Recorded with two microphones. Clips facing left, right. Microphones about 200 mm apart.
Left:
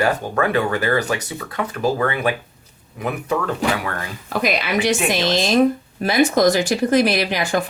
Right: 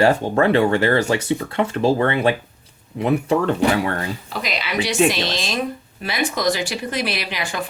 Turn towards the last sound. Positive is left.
turn(degrees=45)  # may be behind; listen again after turning